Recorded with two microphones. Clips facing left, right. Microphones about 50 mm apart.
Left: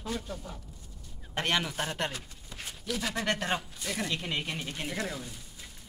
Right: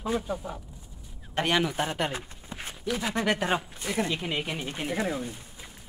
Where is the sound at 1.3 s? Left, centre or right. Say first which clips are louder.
Right 4 dB; centre.